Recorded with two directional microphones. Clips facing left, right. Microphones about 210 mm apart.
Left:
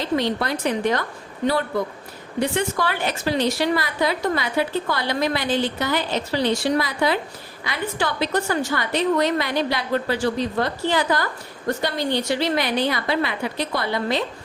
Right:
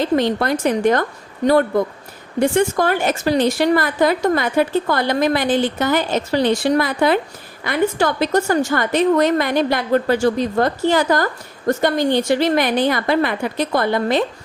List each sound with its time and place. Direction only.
0.2 s a woman's voice: 50° right (ahead or behind)
2.4 s a woman's voice: 45° right (ahead or behind)